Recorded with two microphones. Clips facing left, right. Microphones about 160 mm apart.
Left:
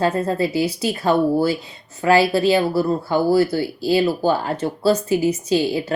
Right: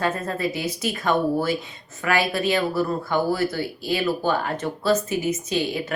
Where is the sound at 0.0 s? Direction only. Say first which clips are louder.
Left 5 dB; 30° left (ahead or behind).